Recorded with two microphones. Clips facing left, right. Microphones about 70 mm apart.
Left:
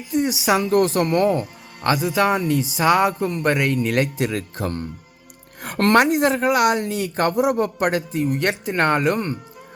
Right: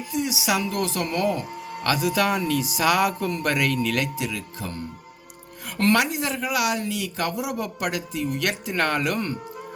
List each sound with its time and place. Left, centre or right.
0.1 s speech: left
1.9 s speech: left
4.2 s speech: left